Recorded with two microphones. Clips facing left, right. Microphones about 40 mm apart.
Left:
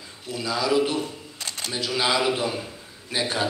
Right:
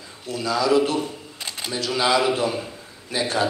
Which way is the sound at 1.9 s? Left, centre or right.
Centre.